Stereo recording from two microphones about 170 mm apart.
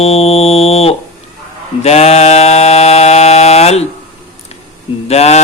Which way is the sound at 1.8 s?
40° left (ahead or behind).